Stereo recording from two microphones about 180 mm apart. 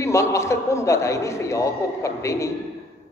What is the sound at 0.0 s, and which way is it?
A man's voice, 15° left (ahead or behind).